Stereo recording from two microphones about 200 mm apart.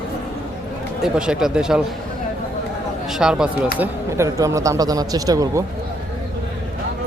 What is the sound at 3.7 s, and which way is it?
Speech, 15° right (ahead or behind).